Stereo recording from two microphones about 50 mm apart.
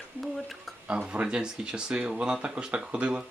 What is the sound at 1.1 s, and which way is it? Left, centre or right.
Speech, centre.